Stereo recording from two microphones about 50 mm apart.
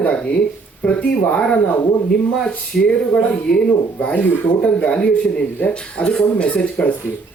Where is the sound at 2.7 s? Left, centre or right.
Centre.